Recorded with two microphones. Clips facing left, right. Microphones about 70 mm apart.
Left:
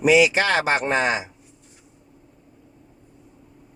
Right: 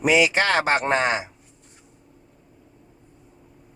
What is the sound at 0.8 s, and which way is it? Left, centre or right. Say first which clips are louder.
Speech: even; right.